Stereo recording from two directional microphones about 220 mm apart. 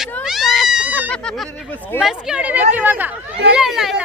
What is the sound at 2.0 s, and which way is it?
Speech, centre (ahead or behind).